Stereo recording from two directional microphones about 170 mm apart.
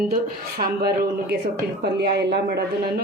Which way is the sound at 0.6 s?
70° right (ahead or behind).